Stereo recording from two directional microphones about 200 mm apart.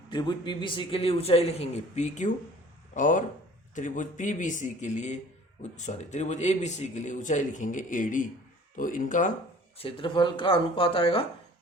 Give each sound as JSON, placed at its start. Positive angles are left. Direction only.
{"t": 0.1, "sound": "a man's voice", "side_deg": 20}
{"t": 9.7, "sound": "a man's voice", "side_deg": 25}